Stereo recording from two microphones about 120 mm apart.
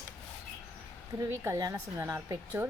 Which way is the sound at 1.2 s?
25° right (ahead or behind).